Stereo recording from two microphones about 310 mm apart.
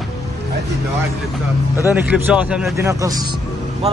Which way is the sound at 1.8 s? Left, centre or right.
Centre.